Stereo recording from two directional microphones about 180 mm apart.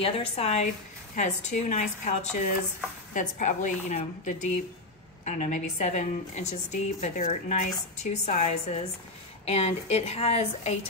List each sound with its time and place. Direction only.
0.0 s a woman's voice: 35° left (ahead or behind)